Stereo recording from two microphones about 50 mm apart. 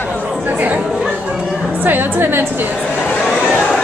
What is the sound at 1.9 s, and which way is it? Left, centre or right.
Speech, right.